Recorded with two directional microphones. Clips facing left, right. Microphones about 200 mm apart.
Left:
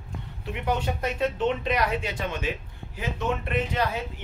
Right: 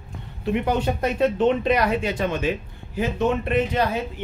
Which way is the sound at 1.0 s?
40° right (ahead or behind).